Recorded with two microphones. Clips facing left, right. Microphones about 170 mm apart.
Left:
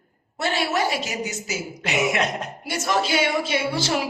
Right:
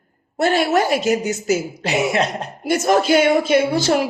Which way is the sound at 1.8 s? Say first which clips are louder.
Right 4 dB; 30° right (ahead or behind).